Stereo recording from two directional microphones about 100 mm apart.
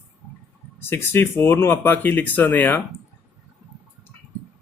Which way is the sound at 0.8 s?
25° left (ahead or behind).